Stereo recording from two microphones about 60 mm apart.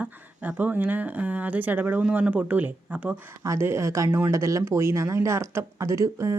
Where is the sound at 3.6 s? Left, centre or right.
Right.